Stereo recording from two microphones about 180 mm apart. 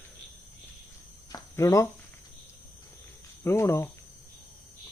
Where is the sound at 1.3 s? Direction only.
15° left (ahead or behind).